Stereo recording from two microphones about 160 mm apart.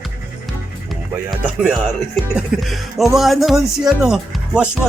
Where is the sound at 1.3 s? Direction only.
Centre (ahead or behind).